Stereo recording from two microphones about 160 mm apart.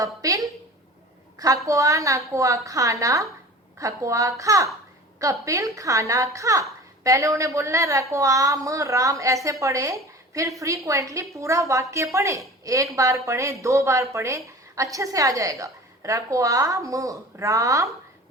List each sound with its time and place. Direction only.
0.0 s speech: 20° right (ahead or behind)
1.6 s a woman's voice: 20° right (ahead or behind)